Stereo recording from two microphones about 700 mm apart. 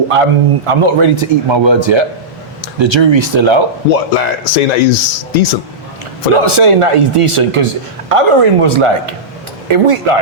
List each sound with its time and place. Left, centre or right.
0.1 s a man's voice: right
4.2 s speech: left
6.3 s speech: right